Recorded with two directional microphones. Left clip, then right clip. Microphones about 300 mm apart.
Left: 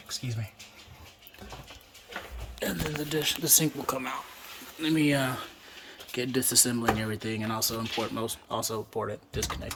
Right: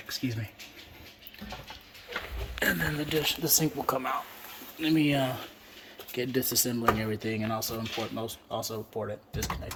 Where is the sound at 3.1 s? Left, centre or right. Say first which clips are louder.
Left 2 dB; centre.